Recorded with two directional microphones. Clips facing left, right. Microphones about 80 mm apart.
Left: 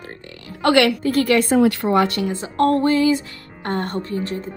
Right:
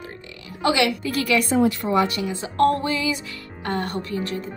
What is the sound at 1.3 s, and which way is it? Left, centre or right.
Speech, left.